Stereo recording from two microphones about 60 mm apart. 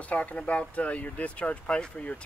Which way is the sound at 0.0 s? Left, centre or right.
Left.